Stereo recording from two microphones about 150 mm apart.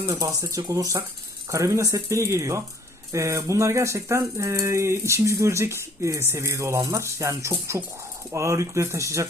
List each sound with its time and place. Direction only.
0.0 s speech: 20° right (ahead or behind)